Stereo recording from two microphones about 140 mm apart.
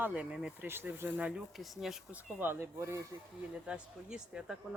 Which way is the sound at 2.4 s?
15° right (ahead or behind).